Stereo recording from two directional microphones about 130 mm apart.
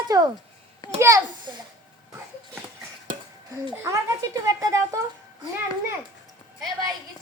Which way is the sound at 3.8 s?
25° right (ahead or behind).